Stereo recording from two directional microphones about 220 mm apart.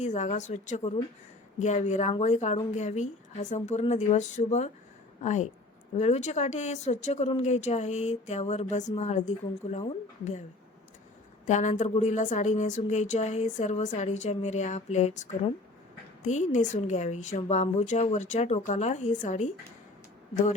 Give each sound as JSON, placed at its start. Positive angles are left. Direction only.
{"t": 0.0, "sound": "speech", "side_deg": 30}
{"t": 11.4, "sound": "speech", "side_deg": 30}